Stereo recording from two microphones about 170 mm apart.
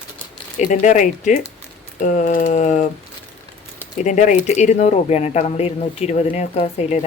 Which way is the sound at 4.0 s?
45° left (ahead or behind).